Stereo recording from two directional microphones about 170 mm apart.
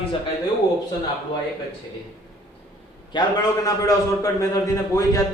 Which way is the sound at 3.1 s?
20° left (ahead or behind).